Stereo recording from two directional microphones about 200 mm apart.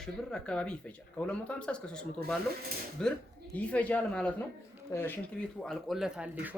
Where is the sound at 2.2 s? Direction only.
50° right (ahead or behind).